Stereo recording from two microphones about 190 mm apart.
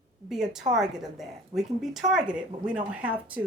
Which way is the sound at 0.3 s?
Centre (ahead or behind).